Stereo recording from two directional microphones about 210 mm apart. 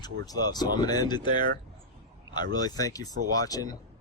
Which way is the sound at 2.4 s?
20° left (ahead or behind).